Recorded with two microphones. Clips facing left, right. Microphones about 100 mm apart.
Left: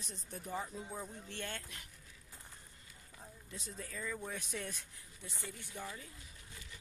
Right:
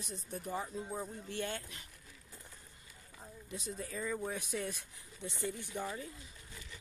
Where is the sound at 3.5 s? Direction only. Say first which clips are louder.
Right 5 dB; 15° right (ahead or behind).